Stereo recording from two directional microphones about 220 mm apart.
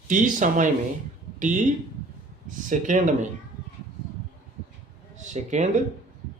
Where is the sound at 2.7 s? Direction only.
35° right (ahead or behind).